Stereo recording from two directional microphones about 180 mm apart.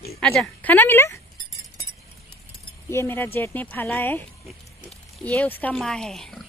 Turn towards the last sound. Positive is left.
turn(degrees=0)  # may be behind; listen again after turning